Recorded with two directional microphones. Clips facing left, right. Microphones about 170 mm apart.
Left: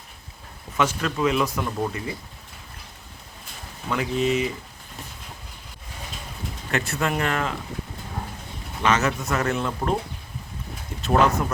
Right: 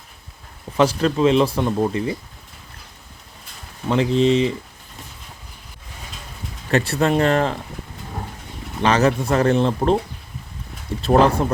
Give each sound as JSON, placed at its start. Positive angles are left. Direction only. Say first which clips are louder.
{"t": 0.8, "sound": "speech", "louder": "right 7 dB", "side_deg": -35}
{"t": 3.8, "sound": "speech", "louder": "right 7 dB", "side_deg": -30}
{"t": 6.7, "sound": "speech", "louder": "right 7 dB", "side_deg": -35}
{"t": 8.8, "sound": "speech", "louder": "right 5 dB", "side_deg": -35}
{"t": 11.0, "sound": "speech", "louder": "right 5 dB", "side_deg": -35}